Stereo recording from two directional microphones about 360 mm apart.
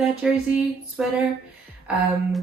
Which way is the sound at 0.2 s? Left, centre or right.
Centre.